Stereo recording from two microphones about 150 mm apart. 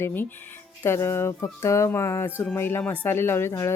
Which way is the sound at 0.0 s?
15° left (ahead or behind).